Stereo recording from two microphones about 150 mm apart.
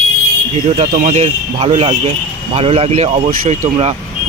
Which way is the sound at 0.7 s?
45° right (ahead or behind).